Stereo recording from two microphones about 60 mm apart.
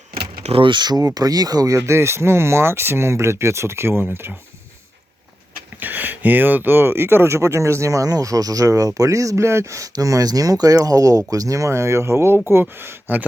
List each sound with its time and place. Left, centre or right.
0.9 s speech: right
5.7 s speech: right